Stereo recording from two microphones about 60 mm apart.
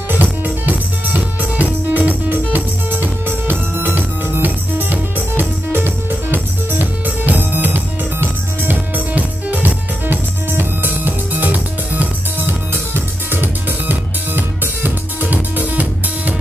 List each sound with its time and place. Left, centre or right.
0.1 s music: right